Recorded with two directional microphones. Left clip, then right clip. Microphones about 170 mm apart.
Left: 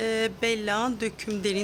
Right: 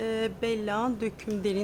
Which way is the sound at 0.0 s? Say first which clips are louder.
Left 3 dB; 5° left (ahead or behind).